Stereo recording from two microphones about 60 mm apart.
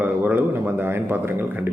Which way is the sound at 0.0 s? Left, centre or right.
Right.